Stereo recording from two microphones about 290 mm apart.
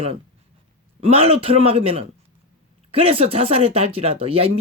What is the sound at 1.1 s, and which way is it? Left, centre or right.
Speech, centre.